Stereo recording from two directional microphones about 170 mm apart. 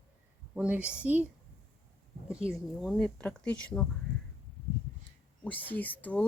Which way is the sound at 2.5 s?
Centre (ahead or behind).